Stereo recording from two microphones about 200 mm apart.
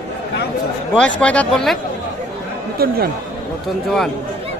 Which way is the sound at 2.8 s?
50° right (ahead or behind).